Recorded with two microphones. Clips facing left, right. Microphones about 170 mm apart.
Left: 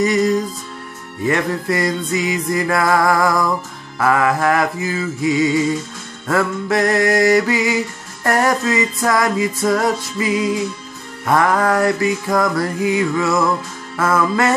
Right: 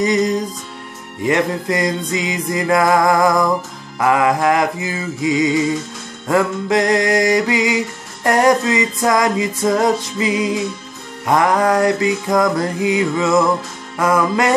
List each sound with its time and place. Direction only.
0.0 s music: 20° right (ahead or behind)